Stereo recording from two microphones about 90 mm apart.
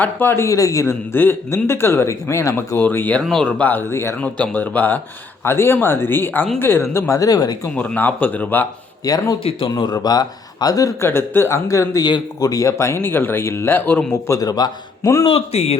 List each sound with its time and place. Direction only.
0.0 s a man's voice: 25° left (ahead or behind)
1.1 s speech: 25° left (ahead or behind)
2.7 s speech: 25° left (ahead or behind)
3.2 s speech: 10° left (ahead or behind)
3.6 s speech: 20° left (ahead or behind)
7.2 s a man's voice: 45° left (ahead or behind)
7.8 s speech: 20° left (ahead or behind)
9.0 s a man's voice: 40° left (ahead or behind)
9.4 s speech: 90° left
9.6 s a man's voice: 50° left (ahead or behind)
11.0 s speech: 25° left (ahead or behind)
12.0 s speech: 50° left (ahead or behind); by 14.0 s 25° left (ahead or behind)
14.3 s a man's voice: 40° left (ahead or behind)